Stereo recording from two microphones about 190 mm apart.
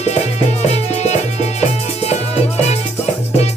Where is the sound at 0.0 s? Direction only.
35° left (ahead or behind).